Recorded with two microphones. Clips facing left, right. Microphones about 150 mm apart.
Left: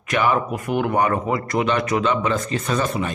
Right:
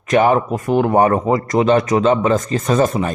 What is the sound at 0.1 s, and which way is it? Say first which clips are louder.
Speech: right 6 dB; 40° right (ahead or behind).